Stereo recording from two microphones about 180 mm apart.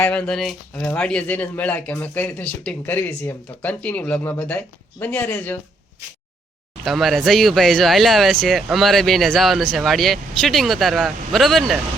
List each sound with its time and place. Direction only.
0.0 s speech: 5° left (ahead or behind)
6.8 s speech: centre (ahead or behind)